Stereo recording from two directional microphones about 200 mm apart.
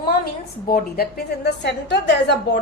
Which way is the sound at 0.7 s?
50° left (ahead or behind).